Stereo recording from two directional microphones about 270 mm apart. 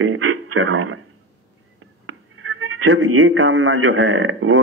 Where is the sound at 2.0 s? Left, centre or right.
Right.